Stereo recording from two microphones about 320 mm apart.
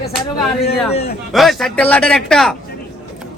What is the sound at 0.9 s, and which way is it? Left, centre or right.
Speech, centre.